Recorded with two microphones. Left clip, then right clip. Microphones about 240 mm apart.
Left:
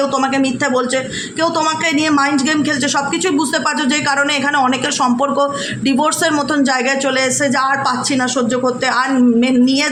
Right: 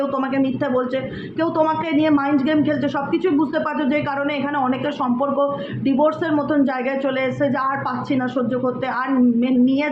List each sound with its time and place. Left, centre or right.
1.4 s a woman's voice: left
3.8 s a woman's voice: left
8.1 s a woman's voice: left